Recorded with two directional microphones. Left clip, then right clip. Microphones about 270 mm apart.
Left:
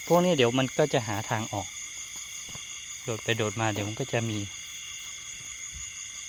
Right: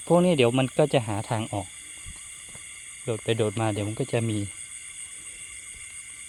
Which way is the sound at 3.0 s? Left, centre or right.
Right.